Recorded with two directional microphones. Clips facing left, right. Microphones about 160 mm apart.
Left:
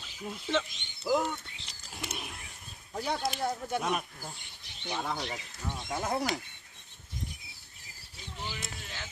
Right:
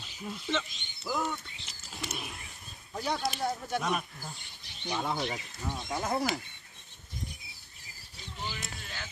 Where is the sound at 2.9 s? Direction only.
20° left (ahead or behind).